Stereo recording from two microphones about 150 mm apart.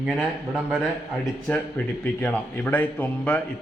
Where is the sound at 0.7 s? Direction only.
Centre (ahead or behind).